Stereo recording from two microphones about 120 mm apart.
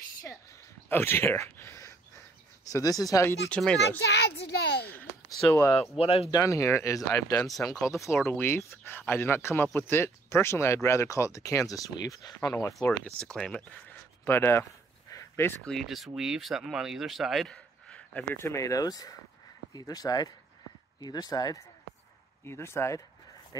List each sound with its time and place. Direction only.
0.8 s a sound: 20° left (ahead or behind)
3.3 s speech: 10° left (ahead or behind)
5.5 s speech: 25° left (ahead or behind)
5.9 s speech: 55° left (ahead or behind)
6.3 s speech: 25° left (ahead or behind)
7.4 s speech: centre (ahead or behind)
8.3 s speech: 20° left (ahead or behind)
12.7 s speech: 10° left (ahead or behind)
13.8 s a sound: 20° left (ahead or behind)
15.6 s speech: 5° left (ahead or behind)
18.4 s speech: 25° left (ahead or behind)
22.4 s speech: 20° left (ahead or behind)